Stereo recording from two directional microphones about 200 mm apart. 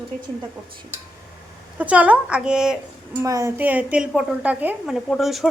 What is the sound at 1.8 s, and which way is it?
Speech, 5° right (ahead or behind).